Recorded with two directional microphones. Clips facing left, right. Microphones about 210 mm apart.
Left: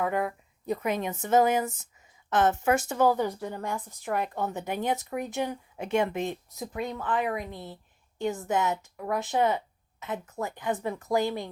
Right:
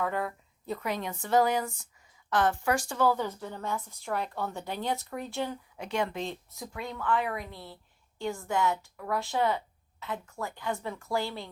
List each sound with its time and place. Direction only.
0.0 s speech: 15° left (ahead or behind)